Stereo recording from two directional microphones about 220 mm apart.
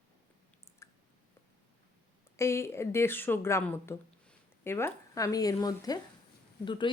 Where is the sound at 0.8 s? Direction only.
15° left (ahead or behind).